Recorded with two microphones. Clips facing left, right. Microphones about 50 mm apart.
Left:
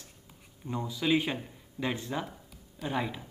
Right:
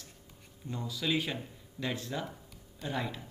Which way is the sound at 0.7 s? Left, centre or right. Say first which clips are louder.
Left 5 dB; left.